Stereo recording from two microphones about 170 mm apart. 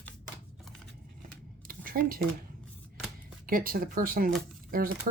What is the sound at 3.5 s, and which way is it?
Speech, 55° right (ahead or behind).